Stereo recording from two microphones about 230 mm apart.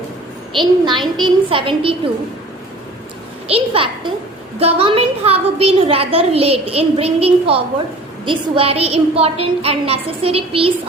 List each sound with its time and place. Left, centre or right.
0.5 s a woman's voice: right
3.5 s a woman's voice: right